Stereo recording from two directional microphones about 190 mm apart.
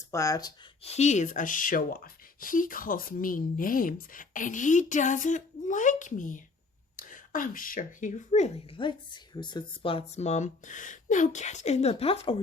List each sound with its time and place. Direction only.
0.1 s speech: 15° left (ahead or behind)
0.8 s speech: 35° left (ahead or behind)